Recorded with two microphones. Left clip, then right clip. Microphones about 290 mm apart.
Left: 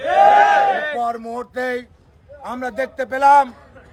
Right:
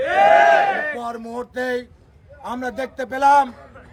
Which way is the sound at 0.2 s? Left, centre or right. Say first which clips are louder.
Left 1 dB; centre.